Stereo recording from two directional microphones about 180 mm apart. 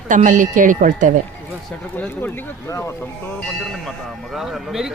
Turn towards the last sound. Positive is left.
turn(degrees=0)  # may be behind; listen again after turning